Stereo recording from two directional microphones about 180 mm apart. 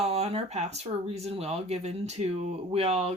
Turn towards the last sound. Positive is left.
turn(degrees=-35)  # may be behind; listen again after turning